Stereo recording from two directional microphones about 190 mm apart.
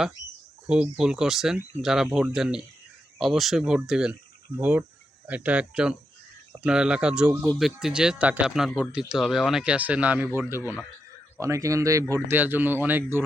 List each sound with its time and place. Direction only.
0.7 s speech: 5° right (ahead or behind)